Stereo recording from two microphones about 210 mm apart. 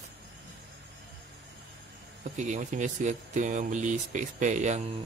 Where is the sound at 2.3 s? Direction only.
35° right (ahead or behind).